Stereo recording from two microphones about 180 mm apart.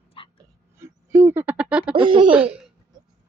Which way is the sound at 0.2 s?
30° left (ahead or behind).